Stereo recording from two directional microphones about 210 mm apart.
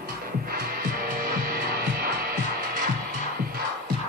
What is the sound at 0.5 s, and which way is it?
Music, 40° right (ahead or behind).